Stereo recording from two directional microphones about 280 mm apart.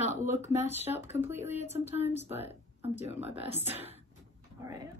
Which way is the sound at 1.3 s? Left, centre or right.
Left.